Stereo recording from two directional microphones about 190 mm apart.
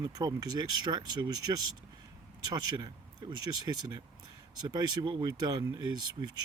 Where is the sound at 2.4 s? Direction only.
20° right (ahead or behind).